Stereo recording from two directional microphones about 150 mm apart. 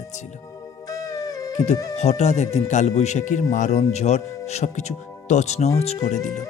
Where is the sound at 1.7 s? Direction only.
20° left (ahead or behind).